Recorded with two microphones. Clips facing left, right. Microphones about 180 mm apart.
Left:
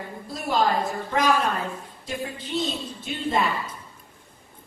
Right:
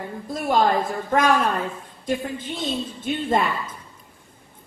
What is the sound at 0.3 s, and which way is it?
A woman's voice, 45° right (ahead or behind).